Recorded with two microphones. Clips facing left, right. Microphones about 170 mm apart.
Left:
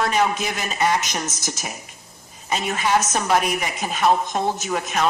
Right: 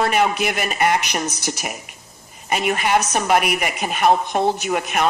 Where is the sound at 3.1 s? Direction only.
60° right (ahead or behind).